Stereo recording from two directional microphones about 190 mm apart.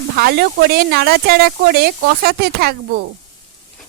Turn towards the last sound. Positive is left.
turn(degrees=-55)  # may be behind; listen again after turning